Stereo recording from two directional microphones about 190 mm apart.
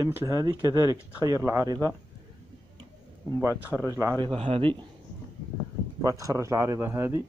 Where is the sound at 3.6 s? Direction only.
15° left (ahead or behind).